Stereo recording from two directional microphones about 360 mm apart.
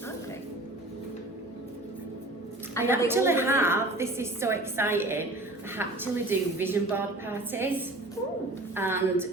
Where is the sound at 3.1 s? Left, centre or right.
Centre.